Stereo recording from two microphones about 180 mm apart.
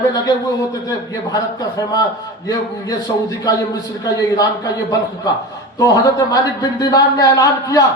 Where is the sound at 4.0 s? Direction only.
20° left (ahead or behind).